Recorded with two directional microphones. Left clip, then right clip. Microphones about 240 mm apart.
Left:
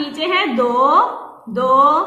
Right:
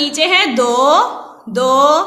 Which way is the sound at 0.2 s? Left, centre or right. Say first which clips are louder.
Right 3 dB; right.